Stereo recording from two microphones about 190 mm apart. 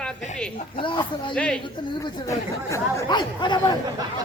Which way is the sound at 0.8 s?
25° left (ahead or behind).